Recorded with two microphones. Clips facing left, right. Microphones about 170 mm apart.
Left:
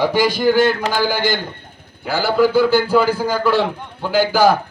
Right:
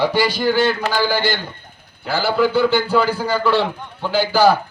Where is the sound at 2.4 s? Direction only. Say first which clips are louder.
Left 3 dB; 10° left (ahead or behind).